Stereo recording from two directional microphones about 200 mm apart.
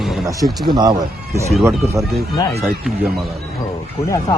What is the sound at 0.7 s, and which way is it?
Speech, 20° right (ahead or behind).